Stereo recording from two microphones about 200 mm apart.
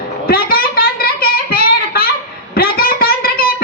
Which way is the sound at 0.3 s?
45° left (ahead or behind).